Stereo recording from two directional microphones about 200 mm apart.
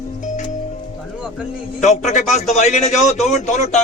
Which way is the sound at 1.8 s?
35° left (ahead or behind).